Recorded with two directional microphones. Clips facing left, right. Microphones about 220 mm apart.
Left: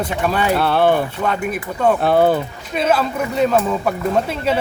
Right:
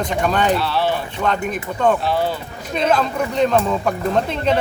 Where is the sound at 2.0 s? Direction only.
55° left (ahead or behind).